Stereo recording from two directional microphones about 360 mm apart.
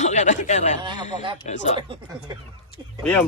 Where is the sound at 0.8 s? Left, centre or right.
Centre.